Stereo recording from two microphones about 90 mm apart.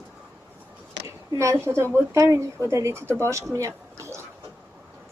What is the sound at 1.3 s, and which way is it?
A woman's voice, 35° right (ahead or behind).